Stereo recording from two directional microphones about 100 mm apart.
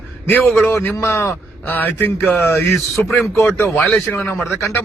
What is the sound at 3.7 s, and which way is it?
Speech, 5° left (ahead or behind).